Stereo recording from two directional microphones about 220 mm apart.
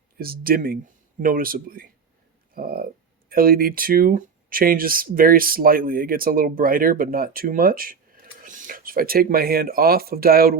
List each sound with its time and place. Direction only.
0.2 s speech: 40° right (ahead or behind)